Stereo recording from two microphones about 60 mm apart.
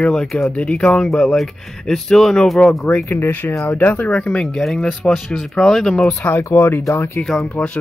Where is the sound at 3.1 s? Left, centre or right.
Left; by 4.5 s centre.